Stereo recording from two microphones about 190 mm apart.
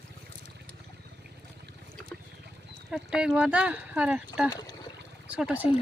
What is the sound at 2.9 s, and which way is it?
Speech, centre (ahead or behind).